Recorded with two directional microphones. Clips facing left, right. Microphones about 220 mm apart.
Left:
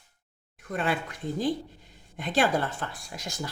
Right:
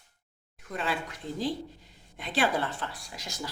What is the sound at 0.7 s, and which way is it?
Speech, 50° left (ahead or behind).